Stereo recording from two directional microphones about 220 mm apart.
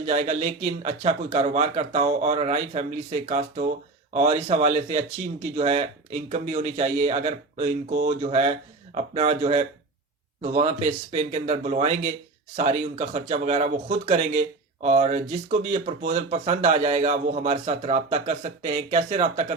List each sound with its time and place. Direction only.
0.0 s speech: 30° right (ahead or behind)